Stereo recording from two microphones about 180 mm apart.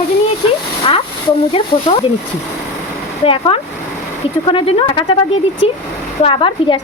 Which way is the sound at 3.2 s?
30° left (ahead or behind).